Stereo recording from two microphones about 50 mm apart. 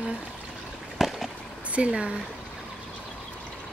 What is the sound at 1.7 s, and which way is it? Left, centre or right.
Speech, right.